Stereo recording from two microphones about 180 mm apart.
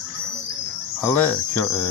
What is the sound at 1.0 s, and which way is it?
Speech, 10° left (ahead or behind).